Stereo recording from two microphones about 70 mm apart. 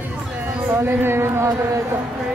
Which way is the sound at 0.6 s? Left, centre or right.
Right.